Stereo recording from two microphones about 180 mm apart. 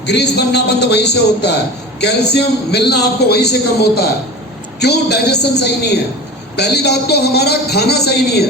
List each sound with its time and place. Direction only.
0.0 s a man's voice: 70° left (ahead or behind)